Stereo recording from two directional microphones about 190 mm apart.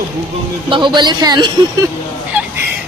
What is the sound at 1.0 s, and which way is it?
Speech, 20° right (ahead or behind).